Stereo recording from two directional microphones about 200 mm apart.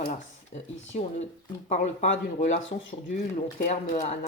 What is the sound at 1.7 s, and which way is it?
Speech, 35° left (ahead or behind).